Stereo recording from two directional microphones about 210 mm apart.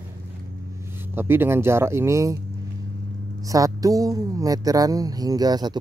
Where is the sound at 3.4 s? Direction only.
15° right (ahead or behind).